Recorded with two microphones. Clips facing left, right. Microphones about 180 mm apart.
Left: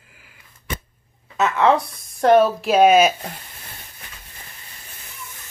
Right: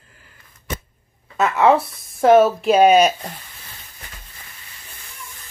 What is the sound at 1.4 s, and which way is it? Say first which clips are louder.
Speech: right 2 dB; 10° right (ahead or behind).